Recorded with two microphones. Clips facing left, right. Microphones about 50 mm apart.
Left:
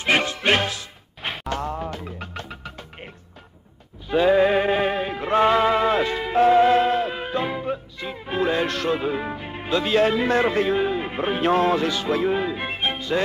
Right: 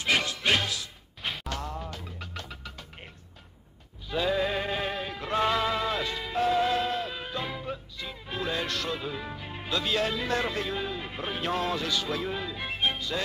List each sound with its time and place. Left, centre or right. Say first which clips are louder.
0.0 s music: left 6 dB; left
4.1 s music: left 10 dB; left